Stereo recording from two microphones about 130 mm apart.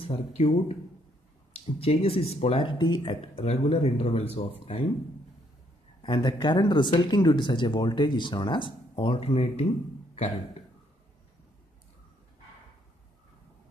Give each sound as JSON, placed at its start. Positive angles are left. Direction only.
{"t": 0.0, "sound": "speech", "side_deg": 50}
{"t": 6.0, "sound": "speech", "side_deg": 35}